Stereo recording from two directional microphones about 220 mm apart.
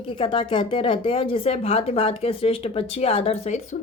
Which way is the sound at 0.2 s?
20° left (ahead or behind).